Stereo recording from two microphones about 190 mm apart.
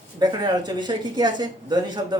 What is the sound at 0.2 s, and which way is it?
Speech, 20° right (ahead or behind).